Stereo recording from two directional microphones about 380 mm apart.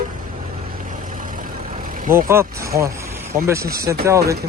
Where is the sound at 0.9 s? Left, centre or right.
Right.